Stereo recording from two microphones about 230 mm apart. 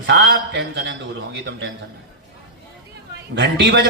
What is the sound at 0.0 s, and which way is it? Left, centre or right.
A man's voice, right.